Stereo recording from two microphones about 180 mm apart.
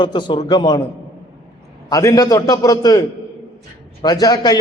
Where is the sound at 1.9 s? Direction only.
20° left (ahead or behind).